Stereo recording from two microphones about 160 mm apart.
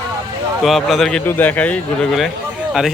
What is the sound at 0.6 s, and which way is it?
A man's voice, centre (ahead or behind).